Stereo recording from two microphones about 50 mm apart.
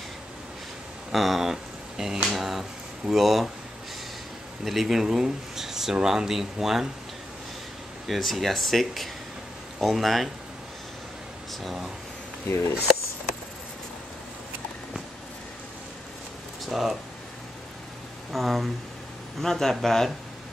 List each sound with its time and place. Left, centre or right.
1.1 s speech: centre
4.6 s speech: centre
8.1 s speech: centre
11.6 s speech: centre
16.6 s speech: centre
18.3 s speech: centre